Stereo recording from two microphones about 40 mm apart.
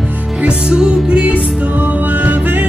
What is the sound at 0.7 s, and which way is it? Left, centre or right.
Music, right.